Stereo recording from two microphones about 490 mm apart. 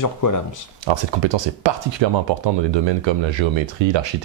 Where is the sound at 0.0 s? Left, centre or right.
Left.